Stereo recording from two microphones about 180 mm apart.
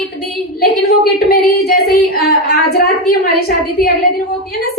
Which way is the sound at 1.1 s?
55° left (ahead or behind).